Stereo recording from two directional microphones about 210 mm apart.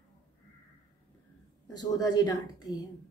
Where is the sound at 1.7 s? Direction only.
20° left (ahead or behind).